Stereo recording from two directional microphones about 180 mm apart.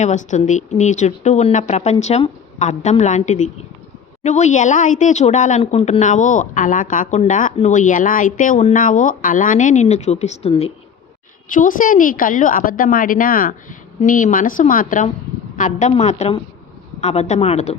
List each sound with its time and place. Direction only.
0.0 s speech: 40° left (ahead or behind)
11.4 s speech: 50° left (ahead or behind)